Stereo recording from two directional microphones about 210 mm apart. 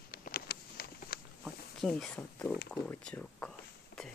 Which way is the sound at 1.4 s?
Centre (ahead or behind).